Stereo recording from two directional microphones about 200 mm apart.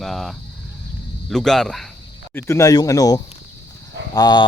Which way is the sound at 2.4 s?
15° left (ahead or behind).